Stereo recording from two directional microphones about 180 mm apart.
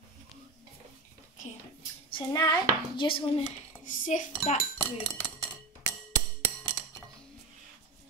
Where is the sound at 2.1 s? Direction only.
20° left (ahead or behind).